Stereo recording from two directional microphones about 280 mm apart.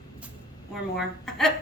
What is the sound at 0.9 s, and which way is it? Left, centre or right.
Speech, centre.